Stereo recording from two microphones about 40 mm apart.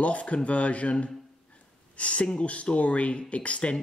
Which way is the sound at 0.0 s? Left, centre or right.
Left.